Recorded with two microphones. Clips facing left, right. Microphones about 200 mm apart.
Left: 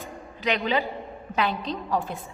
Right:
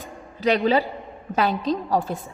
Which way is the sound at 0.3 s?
40° right (ahead or behind).